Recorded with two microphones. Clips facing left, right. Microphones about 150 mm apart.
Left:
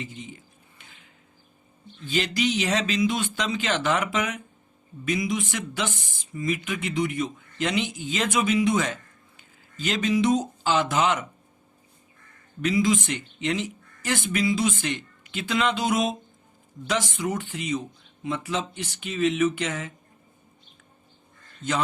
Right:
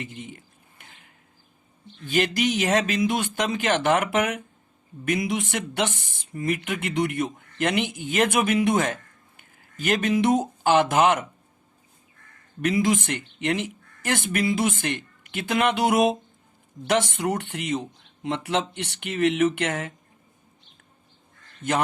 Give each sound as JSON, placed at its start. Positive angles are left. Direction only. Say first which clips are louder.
{"t": 0.0, "sound": "a sound", "louder": "right 1 dB", "side_deg": -60}
{"t": 2.0, "sound": "speech", "louder": "right 2 dB", "side_deg": -55}
{"t": 12.6, "sound": "speech", "louder": "right 1 dB", "side_deg": -60}